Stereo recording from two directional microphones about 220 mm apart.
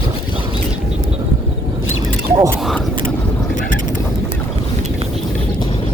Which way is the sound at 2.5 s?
Centre (ahead or behind).